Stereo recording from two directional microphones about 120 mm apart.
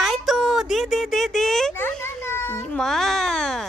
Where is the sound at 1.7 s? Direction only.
20° left (ahead or behind).